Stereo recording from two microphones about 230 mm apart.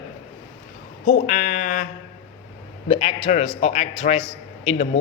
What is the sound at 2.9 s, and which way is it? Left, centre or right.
Speech, left.